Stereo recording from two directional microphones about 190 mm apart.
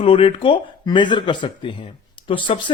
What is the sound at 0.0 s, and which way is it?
Speech, 30° left (ahead or behind).